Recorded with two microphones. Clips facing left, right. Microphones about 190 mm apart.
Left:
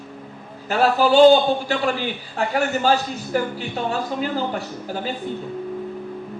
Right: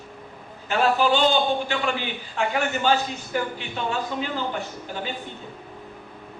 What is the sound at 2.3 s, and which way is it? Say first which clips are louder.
A man's voice: left 3 dB; 40° left (ahead or behind).